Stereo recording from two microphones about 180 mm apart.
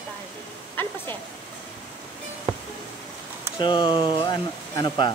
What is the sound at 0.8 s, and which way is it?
Speech, 10° left (ahead or behind).